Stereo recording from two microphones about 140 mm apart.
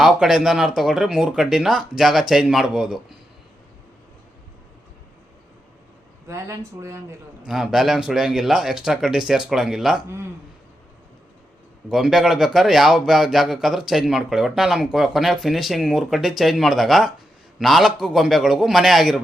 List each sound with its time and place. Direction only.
0.0 s a man's voice: 5° right (ahead or behind)
6.2 s speech: 20° right (ahead or behind)
7.4 s a man's voice: 5° right (ahead or behind)
11.9 s a man's voice: centre (ahead or behind)